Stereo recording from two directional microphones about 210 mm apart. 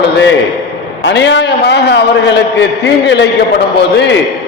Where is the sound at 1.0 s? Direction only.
55° left (ahead or behind).